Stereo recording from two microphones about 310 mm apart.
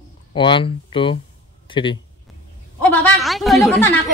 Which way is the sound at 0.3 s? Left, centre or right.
Centre.